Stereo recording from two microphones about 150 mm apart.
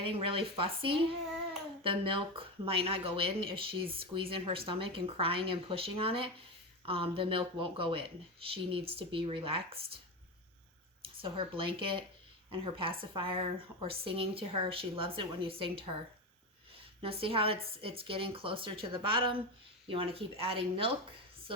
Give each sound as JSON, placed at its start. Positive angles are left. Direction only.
{"t": 0.0, "sound": "speech", "side_deg": -35}
{"t": 11.2, "sound": "speech", "side_deg": -35}